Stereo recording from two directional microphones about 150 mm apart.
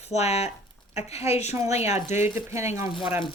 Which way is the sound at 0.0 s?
45° left (ahead or behind).